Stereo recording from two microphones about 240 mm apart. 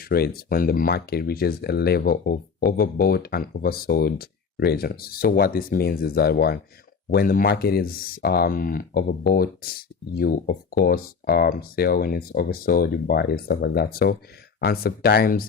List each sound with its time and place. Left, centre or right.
0.0 s speech: left